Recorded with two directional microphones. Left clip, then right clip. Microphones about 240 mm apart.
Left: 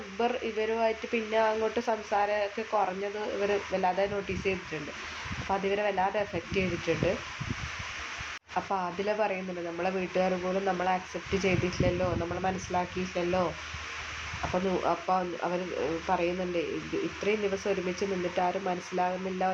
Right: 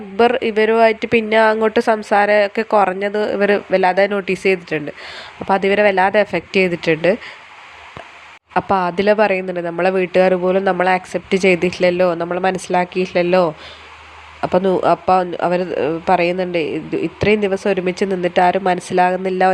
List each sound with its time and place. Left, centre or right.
0.2 s speech: right
8.5 s speech: right
14.5 s speech: right